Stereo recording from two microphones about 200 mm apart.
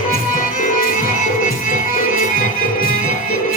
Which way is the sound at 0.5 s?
45° left (ahead or behind).